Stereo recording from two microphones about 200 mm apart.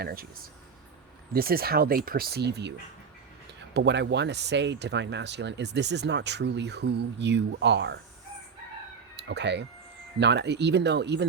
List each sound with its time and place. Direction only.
0.0 s speech: 50° right (ahead or behind)
1.3 s speech: 50° right (ahead or behind)
3.8 s speech: 60° right (ahead or behind)
9.1 s speech: 60° right (ahead or behind)